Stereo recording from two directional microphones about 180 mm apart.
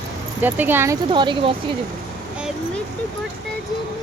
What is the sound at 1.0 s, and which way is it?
Speech, 25° right (ahead or behind).